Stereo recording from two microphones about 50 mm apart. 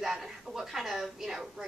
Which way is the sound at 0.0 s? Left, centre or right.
Centre.